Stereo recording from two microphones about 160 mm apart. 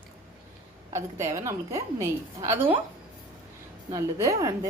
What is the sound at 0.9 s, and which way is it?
A woman's voice, 20° right (ahead or behind).